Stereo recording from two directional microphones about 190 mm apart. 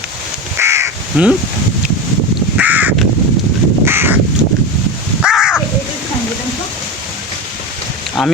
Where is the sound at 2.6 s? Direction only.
10° right (ahead or behind).